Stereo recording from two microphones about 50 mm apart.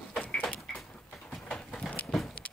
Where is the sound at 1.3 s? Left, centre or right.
Centre.